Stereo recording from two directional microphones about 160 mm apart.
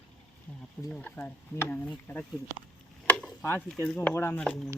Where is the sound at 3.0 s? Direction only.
5° left (ahead or behind).